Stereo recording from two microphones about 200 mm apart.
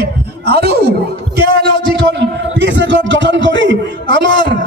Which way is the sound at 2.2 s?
65° right (ahead or behind).